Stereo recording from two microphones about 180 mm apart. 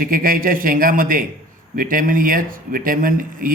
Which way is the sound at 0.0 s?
55° right (ahead or behind).